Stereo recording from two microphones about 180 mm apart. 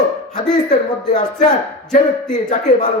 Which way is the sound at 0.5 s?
40° left (ahead or behind).